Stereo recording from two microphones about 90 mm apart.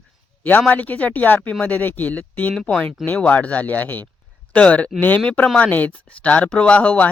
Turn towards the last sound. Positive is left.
turn(degrees=15)  # may be behind; listen again after turning